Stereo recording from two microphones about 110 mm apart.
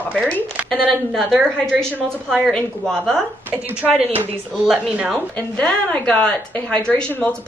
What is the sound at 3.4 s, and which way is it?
A woman's voice, 15° right (ahead or behind).